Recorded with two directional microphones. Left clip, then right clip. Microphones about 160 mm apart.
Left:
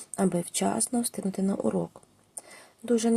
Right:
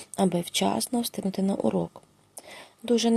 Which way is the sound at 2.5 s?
25° right (ahead or behind).